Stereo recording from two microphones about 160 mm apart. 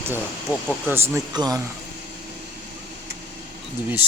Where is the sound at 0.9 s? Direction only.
15° right (ahead or behind).